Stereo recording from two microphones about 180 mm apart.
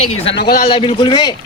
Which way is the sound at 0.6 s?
30° left (ahead or behind).